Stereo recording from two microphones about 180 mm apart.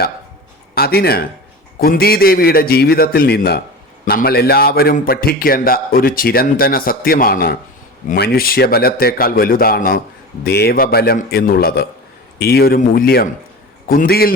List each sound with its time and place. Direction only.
0.8 s a man's voice: 60° left (ahead or behind)